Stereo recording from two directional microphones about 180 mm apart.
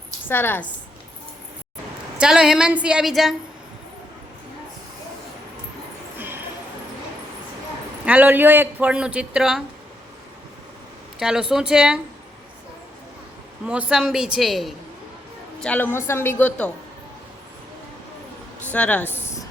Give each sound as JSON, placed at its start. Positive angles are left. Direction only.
{"t": 0.3, "sound": "a woman's voice", "side_deg": 10}
{"t": 2.1, "sound": "a woman's voice", "side_deg": -5}
{"t": 6.1, "sound": "a sound", "side_deg": -10}
{"t": 8.0, "sound": "speech", "side_deg": -10}
{"t": 11.2, "sound": "a woman's voice", "side_deg": -5}
{"t": 13.7, "sound": "a woman's voice", "side_deg": -5}
{"t": 18.7, "sound": "a woman's voice", "side_deg": 10}